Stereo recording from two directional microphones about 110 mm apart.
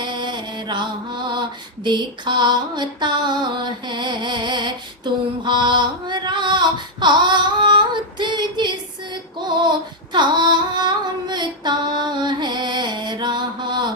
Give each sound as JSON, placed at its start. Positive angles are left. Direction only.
{"t": 0.0, "sound": "mantra", "side_deg": -45}
{"t": 5.4, "sound": "a sound", "side_deg": -45}
{"t": 9.6, "sound": "singing", "side_deg": -45}